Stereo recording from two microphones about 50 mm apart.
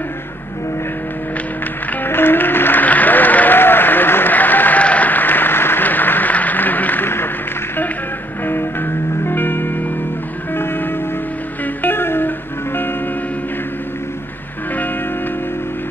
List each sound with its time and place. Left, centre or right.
2.0 s applause: left
8.5 s music: left